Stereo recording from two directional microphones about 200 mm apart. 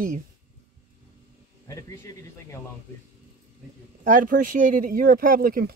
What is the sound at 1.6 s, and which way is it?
Speech, 15° left (ahead or behind).